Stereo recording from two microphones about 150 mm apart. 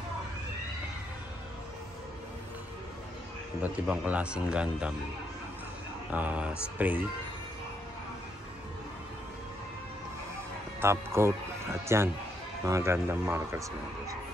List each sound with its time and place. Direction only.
3.6 s a man's voice: 10° right (ahead or behind)
6.1 s a man's voice: 10° right (ahead or behind)
10.8 s a man's voice: 15° right (ahead or behind)